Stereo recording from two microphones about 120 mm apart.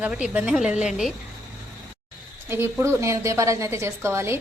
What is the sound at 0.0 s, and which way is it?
A woman's voice, 10° right (ahead or behind).